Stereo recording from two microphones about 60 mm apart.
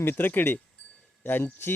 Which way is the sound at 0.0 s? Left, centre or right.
Left.